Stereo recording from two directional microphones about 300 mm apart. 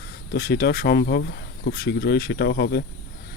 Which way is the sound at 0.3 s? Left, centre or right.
Left.